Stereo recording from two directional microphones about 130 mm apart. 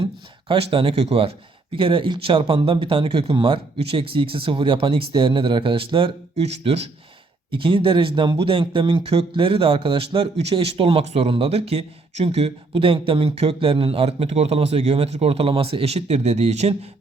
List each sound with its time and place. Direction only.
0.0 s speech: 45° right (ahead or behind)
7.5 s speech: 40° right (ahead or behind)